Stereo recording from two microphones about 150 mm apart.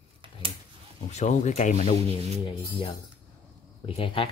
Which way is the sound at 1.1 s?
50° left (ahead or behind).